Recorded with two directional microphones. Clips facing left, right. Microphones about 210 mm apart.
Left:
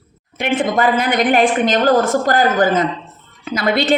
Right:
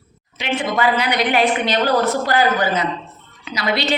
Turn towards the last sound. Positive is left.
turn(degrees=50)  # may be behind; listen again after turning